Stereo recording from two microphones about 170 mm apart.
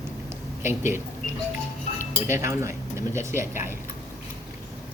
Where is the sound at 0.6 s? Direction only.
15° right (ahead or behind).